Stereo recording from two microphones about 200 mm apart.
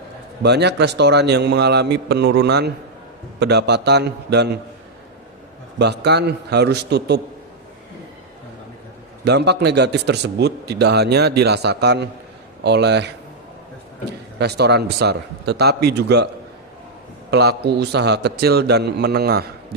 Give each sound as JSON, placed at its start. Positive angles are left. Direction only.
{"t": 0.4, "sound": "speech", "side_deg": -55}
{"t": 5.8, "sound": "speech", "side_deg": -55}
{"t": 9.2, "sound": "speech", "side_deg": -55}
{"t": 14.3, "sound": "speech", "side_deg": -55}
{"t": 17.3, "sound": "speech", "side_deg": -55}